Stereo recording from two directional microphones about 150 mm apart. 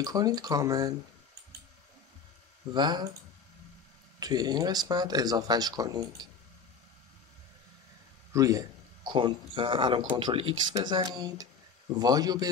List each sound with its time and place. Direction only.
0.0 s speech: 25° right (ahead or behind)
2.7 s speech: 30° right (ahead or behind)
4.2 s speech: 25° right (ahead or behind)
8.3 s a man's voice: 20° right (ahead or behind)